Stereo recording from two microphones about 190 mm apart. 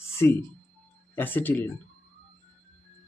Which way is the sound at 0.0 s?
15° left (ahead or behind).